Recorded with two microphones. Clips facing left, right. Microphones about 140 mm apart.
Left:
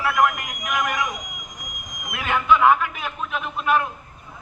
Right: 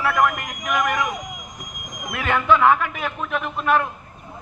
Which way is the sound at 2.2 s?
10° left (ahead or behind).